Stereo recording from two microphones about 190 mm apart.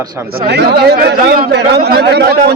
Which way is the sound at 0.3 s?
60° right (ahead or behind).